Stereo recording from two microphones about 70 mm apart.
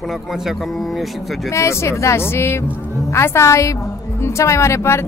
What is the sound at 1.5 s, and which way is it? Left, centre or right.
A woman's voice, left.